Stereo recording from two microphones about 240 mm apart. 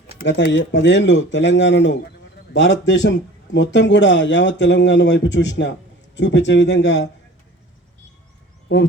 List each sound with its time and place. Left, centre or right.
0.2 s speech: left